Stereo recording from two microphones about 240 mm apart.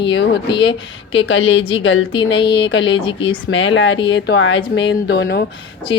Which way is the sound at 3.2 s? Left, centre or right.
Left.